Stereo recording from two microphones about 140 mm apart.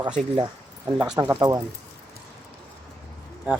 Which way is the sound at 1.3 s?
25° right (ahead or behind).